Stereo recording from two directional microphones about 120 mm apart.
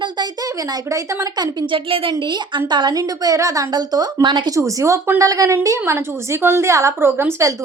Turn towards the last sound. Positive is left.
turn(degrees=-20)  # may be behind; listen again after turning